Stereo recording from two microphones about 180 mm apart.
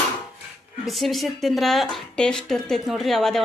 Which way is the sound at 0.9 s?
Centre (ahead or behind).